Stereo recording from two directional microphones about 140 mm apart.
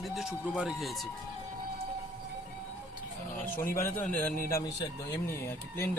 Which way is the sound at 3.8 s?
70° left (ahead or behind).